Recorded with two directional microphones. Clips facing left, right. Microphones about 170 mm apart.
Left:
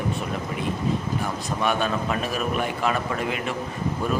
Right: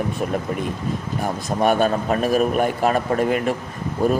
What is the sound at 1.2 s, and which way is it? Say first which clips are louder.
A man's voice: right 5 dB; 45° right (ahead or behind).